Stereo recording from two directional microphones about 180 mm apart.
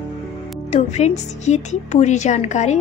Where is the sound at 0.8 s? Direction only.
40° left (ahead or behind).